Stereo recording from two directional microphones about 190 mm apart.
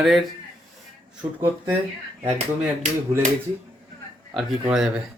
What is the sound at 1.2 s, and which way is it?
Speech, 10° right (ahead or behind).